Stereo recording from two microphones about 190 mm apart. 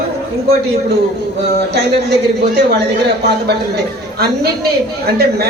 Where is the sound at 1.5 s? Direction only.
60° right (ahead or behind).